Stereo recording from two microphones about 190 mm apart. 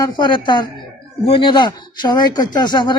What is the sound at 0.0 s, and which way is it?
Speech, 25° left (ahead or behind).